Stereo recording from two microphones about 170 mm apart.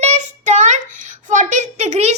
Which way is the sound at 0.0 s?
45° right (ahead or behind).